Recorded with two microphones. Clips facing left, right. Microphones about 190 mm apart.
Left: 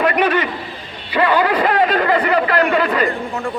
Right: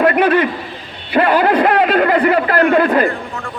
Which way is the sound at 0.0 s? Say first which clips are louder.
Right 4 dB; 55° right (ahead or behind).